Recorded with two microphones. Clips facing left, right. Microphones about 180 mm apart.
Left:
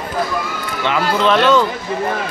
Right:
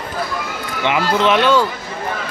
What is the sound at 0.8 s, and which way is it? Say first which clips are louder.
Speech: even; 15° right (ahead or behind).